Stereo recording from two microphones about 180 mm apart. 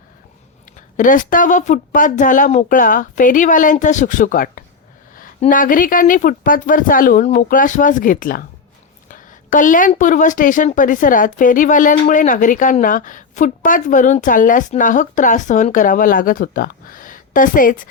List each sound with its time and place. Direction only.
0.9 s a woman's voice: 45° left (ahead or behind)